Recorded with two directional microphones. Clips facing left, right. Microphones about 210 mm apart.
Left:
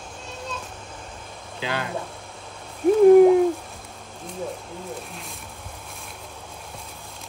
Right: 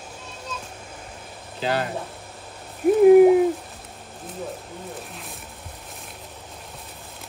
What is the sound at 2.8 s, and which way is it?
Hoot, 5° right (ahead or behind).